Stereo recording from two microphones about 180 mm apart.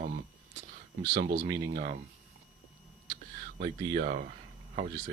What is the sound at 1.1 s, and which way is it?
Speech, 50° right (ahead or behind).